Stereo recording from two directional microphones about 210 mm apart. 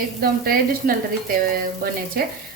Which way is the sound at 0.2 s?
45° right (ahead or behind).